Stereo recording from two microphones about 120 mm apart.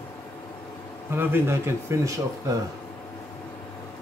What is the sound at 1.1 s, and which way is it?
Speech, 20° right (ahead or behind).